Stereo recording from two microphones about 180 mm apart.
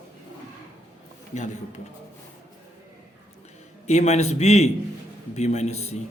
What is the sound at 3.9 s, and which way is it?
A man's voice, 40° left (ahead or behind).